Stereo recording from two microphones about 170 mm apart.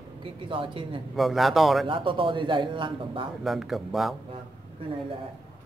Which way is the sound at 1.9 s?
30° right (ahead or behind).